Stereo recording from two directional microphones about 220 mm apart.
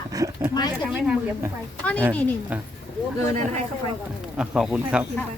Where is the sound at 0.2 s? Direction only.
15° right (ahead or behind).